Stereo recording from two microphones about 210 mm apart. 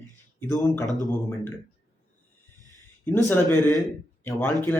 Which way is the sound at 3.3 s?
10° left (ahead or behind).